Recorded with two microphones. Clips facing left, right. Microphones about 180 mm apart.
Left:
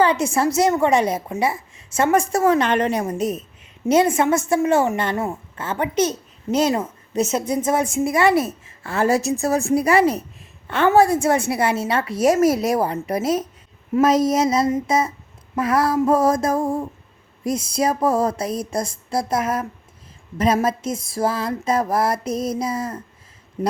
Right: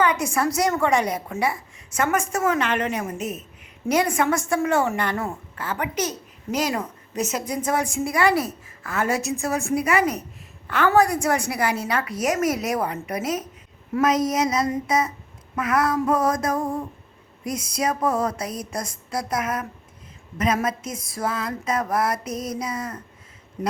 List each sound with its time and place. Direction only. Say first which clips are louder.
0.0 s a child's voice: left 4 dB; 25° left (ahead or behind)